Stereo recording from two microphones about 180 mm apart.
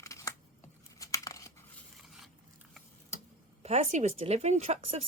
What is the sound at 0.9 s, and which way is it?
Tearing, 20° left (ahead or behind).